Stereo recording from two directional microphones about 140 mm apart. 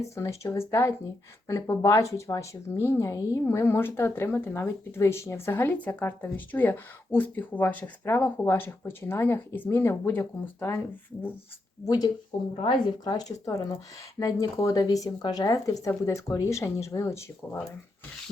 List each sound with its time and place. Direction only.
0.2 s speech: 20° left (ahead or behind)
11.9 s speech: 30° left (ahead or behind)